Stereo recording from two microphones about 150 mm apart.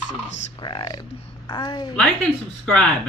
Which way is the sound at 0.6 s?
30° left (ahead or behind).